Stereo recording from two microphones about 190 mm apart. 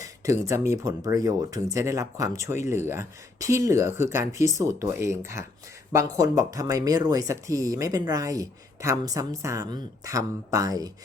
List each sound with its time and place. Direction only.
0.0 s speech: 15° right (ahead or behind)